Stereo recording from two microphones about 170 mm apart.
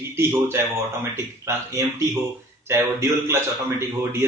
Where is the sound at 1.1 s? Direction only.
15° right (ahead or behind).